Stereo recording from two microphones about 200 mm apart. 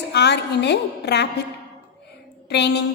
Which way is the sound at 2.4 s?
60° left (ahead or behind).